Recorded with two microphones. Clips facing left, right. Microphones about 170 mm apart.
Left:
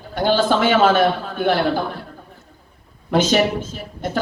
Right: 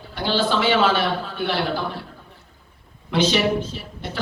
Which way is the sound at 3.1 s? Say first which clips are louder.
Left 3 dB; 45° left (ahead or behind).